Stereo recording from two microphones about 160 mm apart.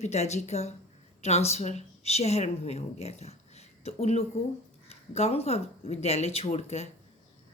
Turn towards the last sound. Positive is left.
turn(degrees=40)  # may be behind; listen again after turning